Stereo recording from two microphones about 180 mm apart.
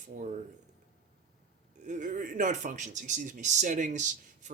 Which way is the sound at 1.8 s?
45° right (ahead or behind).